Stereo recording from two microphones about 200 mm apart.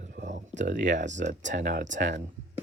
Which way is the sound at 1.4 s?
65° right (ahead or behind).